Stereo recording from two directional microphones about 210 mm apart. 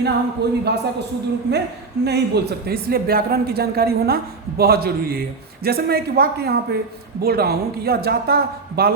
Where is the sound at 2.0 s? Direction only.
50° right (ahead or behind).